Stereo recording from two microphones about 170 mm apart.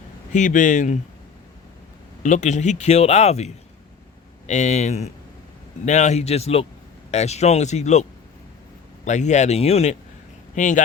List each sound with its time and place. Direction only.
0.3 s speech: 45° left (ahead or behind)
2.2 s speech: 45° left (ahead or behind)
9.0 s speech: 45° left (ahead or behind)